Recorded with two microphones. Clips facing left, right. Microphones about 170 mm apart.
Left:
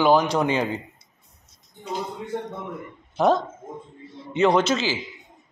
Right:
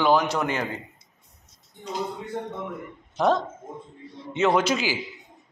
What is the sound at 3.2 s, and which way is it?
A man's voice, centre (ahead or behind).